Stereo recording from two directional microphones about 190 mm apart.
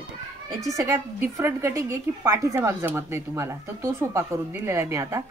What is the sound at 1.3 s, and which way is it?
Speech, 15° right (ahead or behind).